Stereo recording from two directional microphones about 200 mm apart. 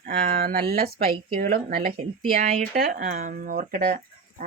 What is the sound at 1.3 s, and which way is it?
Speech, 45° right (ahead or behind).